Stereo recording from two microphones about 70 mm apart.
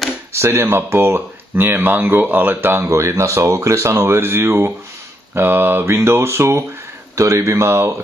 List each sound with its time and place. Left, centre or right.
0.3 s speech: right